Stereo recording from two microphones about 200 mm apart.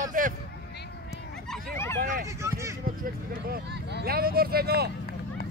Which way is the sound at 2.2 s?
15° right (ahead or behind).